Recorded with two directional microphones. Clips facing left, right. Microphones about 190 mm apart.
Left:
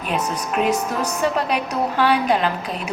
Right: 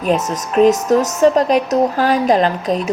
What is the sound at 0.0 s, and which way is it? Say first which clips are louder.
A woman's voice: right 6 dB; 40° right (ahead or behind).